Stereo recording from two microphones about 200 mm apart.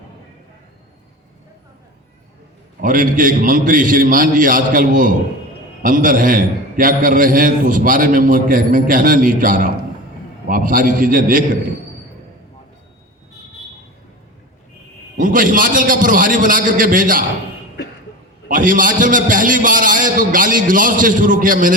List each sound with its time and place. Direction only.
2.8 s a man's voice: 45° right (ahead or behind)
15.2 s a man's voice: 40° right (ahead or behind)
18.4 s a man's voice: 40° right (ahead or behind)